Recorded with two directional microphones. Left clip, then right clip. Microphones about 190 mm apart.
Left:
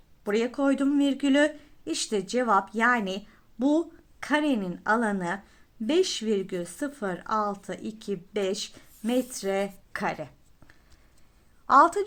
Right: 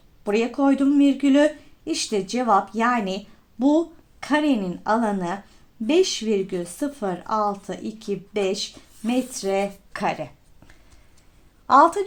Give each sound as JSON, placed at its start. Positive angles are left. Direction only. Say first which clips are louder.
{"t": 0.3, "sound": "speech", "louder": "right 5 dB", "side_deg": 25}
{"t": 11.6, "sound": "a woman's voice", "louder": "right 4 dB", "side_deg": 20}